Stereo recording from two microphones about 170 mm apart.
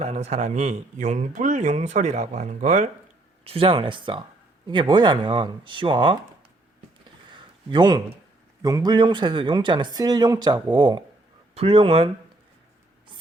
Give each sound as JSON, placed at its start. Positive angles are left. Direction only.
{"t": 0.0, "sound": "a man's voice", "side_deg": -40}
{"t": 3.4, "sound": "speech", "side_deg": -35}
{"t": 7.3, "sound": "a sound", "side_deg": -25}
{"t": 8.6, "sound": "speech", "side_deg": -25}